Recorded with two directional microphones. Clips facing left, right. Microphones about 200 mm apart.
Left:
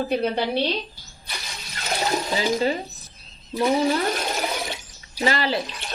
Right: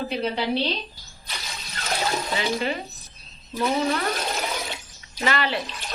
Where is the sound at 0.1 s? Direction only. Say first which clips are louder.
Left 2 dB; 50° left (ahead or behind).